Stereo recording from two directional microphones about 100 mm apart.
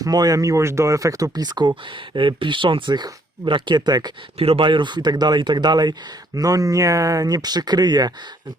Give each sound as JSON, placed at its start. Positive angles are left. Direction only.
{"t": 0.0, "sound": "speech", "side_deg": -40}
{"t": 4.4, "sound": "speech", "side_deg": -75}